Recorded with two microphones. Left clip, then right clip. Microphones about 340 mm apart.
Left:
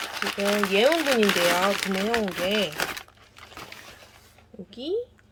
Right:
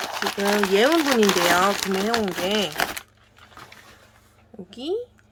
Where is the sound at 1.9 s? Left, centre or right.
Centre.